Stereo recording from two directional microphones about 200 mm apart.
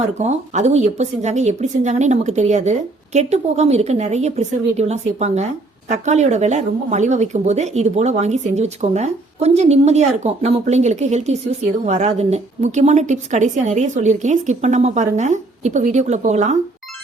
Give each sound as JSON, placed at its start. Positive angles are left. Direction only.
{"t": 0.2, "sound": "speech", "side_deg": -35}